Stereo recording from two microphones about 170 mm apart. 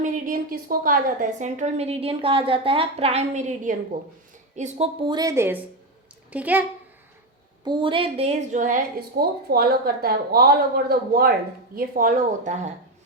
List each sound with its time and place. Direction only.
0.0 s a woman's voice: 55° right (ahead or behind)
5.0 s a woman's voice: 25° right (ahead or behind)
7.6 s a woman's voice: 30° right (ahead or behind); by 12.7 s 50° right (ahead or behind)